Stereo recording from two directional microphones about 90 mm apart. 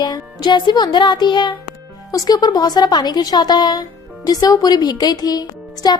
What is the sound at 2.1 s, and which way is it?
Speech, 45° left (ahead or behind).